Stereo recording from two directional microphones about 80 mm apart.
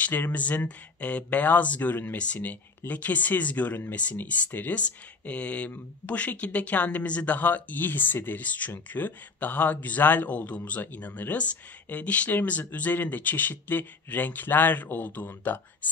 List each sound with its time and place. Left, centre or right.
0.0 s speech: left